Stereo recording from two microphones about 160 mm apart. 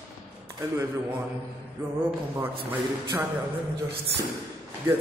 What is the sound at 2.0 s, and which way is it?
Speech, 15° right (ahead or behind).